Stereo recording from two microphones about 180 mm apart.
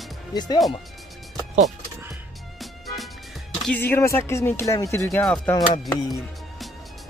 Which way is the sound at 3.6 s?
10° left (ahead or behind).